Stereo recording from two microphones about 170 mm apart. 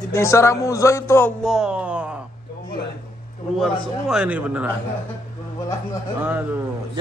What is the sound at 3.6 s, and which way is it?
A man's voice, 5° right (ahead or behind).